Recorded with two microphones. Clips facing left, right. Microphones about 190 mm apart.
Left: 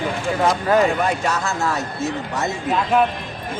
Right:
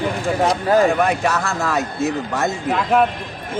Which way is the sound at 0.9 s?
60° right (ahead or behind).